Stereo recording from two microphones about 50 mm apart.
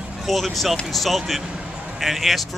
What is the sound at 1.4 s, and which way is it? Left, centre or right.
A man's voice, centre.